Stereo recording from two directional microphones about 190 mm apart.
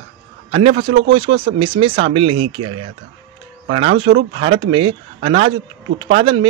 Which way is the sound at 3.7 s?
30° right (ahead or behind).